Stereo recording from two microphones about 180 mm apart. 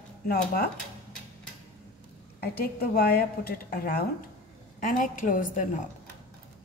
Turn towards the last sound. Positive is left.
turn(degrees=45)  # may be behind; listen again after turning